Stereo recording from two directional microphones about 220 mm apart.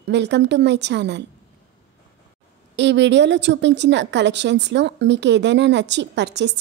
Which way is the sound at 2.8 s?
55° right (ahead or behind).